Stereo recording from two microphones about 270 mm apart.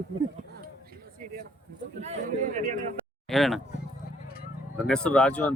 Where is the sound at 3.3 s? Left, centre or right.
Centre.